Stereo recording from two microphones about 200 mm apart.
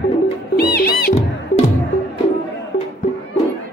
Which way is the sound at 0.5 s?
50° left (ahead or behind).